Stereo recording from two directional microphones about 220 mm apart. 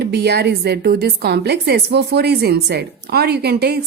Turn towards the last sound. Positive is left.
turn(degrees=-45)  # may be behind; listen again after turning